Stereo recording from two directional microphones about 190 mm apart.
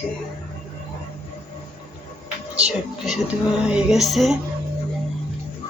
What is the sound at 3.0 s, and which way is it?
A woman's voice, 5° right (ahead or behind).